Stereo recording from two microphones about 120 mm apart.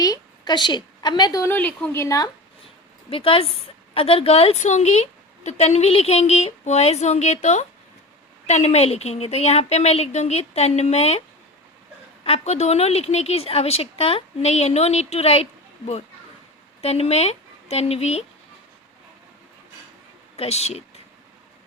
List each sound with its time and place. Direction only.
0.0 s a woman's voice: 35° left (ahead or behind)
1.5 s a woman's voice: 15° left (ahead or behind); by 2.3 s 30° left (ahead or behind)
3.1 s a woman's voice: 50° left (ahead or behind)
12.2 s a woman's voice: 60° left (ahead or behind)
16.8 s speech: 60° left (ahead or behind)
20.3 s speech: 60° left (ahead or behind)